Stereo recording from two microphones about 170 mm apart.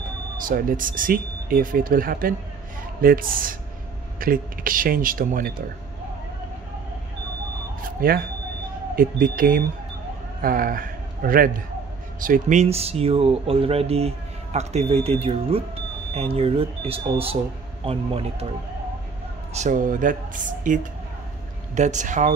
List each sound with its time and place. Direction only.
0.5 s speech: 55° right (ahead or behind)
7.8 s a sound: 60° right (ahead or behind)
8.9 s a man's voice: 55° right (ahead or behind); by 18.5 s 35° right (ahead or behind)
19.5 s speech: 45° right (ahead or behind)